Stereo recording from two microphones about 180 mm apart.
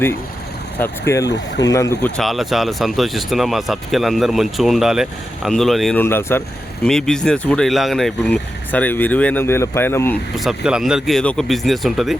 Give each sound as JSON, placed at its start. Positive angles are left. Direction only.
{"t": 0.8, "sound": "speech", "side_deg": 15}
{"t": 6.0, "sound": "speech", "side_deg": 10}
{"t": 10.3, "sound": "speech", "side_deg": 0}